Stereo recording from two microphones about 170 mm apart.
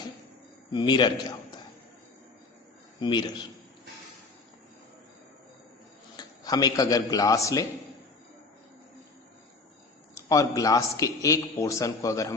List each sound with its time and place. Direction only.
0.7 s a man's voice: 25° left (ahead or behind)
3.0 s a man's voice: 25° left (ahead or behind)
6.1 s a man's voice: 20° left (ahead or behind)
10.2 s a man's voice: 20° left (ahead or behind)